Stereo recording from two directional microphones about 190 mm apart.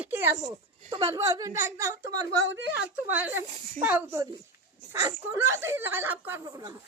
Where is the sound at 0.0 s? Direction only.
15° right (ahead or behind).